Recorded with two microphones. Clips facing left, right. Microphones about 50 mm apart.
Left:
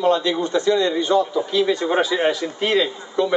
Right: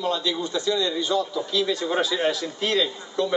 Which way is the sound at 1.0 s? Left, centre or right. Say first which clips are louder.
Left 6 dB; centre.